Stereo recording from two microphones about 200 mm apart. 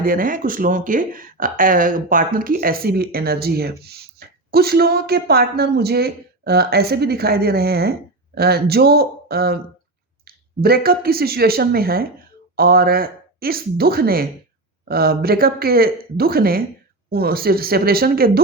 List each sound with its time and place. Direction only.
0.0 s speech: 45° right (ahead or behind)